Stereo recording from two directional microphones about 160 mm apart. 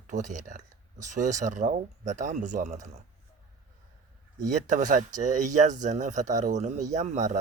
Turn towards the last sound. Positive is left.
turn(degrees=-45)  # may be behind; listen again after turning